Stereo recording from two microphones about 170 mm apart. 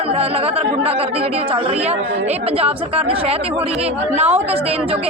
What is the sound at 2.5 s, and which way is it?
Speech, 35° right (ahead or behind).